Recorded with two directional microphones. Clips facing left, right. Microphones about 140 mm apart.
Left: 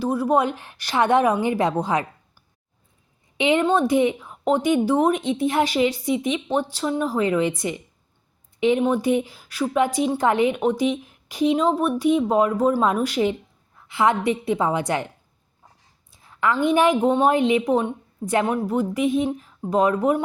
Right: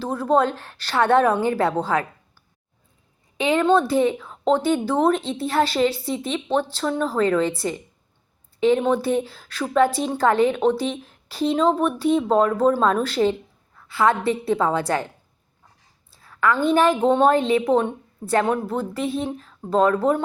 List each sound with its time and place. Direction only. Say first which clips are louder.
0.0 s a woman's voice: even; 10° left (ahead or behind)
3.3 s a woman's voice: right 1 dB; 20° left (ahead or behind)